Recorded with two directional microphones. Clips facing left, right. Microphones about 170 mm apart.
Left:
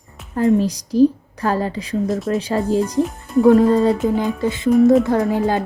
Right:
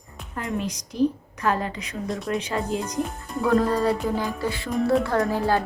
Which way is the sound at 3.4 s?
25° left (ahead or behind).